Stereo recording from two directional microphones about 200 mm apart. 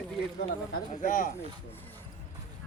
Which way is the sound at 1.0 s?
40° left (ahead or behind).